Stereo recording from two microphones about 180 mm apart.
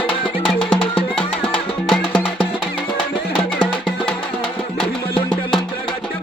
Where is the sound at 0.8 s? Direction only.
30° left (ahead or behind).